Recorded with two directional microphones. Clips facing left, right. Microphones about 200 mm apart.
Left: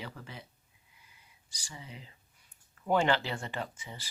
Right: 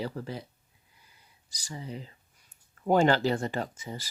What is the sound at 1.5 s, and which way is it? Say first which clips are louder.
Speech: right 9 dB; 40° right (ahead or behind).